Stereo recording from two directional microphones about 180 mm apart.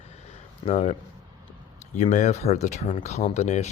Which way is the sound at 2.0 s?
40° left (ahead or behind).